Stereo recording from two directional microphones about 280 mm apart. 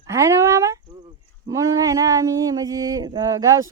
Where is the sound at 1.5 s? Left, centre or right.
Centre.